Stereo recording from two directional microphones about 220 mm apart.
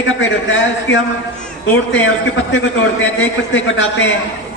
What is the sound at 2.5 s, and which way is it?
A man's voice, 55° left (ahead or behind).